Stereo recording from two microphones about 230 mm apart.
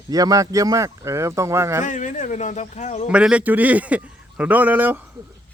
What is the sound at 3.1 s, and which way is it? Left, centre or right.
A man's voice, centre.